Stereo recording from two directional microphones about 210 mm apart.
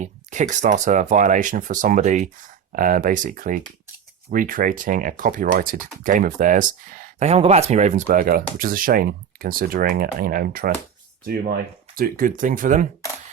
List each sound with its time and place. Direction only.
0.0 s speech: 35° right (ahead or behind)